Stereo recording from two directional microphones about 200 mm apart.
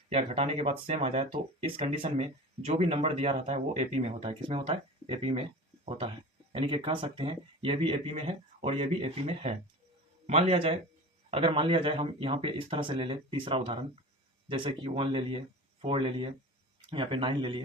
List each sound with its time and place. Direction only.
0.1 s speech: 30° right (ahead or behind)